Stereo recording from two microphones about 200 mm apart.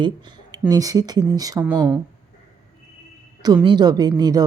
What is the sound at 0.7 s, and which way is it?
Speech, 20° right (ahead or behind).